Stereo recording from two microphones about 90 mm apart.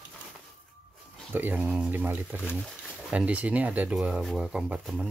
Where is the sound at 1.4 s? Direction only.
20° right (ahead or behind).